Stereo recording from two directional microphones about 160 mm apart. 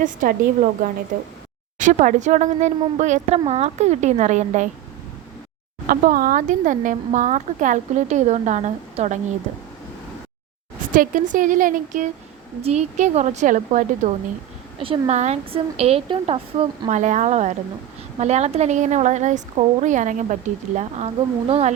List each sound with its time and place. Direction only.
0.0 s a woman's voice: 55° right (ahead or behind)
1.8 s a woman's voice: 50° right (ahead or behind)
5.9 s a woman's voice: 65° right (ahead or behind); by 9.1 s 45° right (ahead or behind)
10.9 s a woman's voice: 55° right (ahead or behind)
12.6 s a woman's voice: 45° right (ahead or behind)
14.8 s a woman's voice: 40° right (ahead or behind)